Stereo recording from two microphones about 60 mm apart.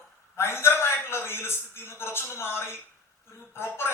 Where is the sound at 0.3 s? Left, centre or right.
Left.